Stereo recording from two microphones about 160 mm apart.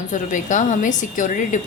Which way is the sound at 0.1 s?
50° left (ahead or behind).